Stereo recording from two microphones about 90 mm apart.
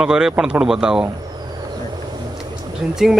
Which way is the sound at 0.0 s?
10° right (ahead or behind).